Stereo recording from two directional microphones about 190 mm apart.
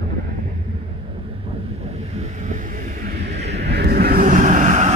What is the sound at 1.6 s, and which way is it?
Vehicle, 35° right (ahead or behind).